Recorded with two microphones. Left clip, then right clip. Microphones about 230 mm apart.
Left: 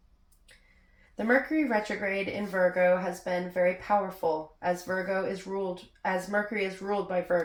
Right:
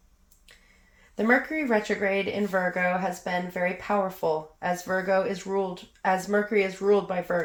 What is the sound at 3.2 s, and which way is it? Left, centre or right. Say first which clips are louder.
Speech: left 1 dB; right.